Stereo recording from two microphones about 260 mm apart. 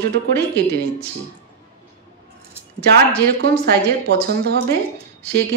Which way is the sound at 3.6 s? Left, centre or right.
Right.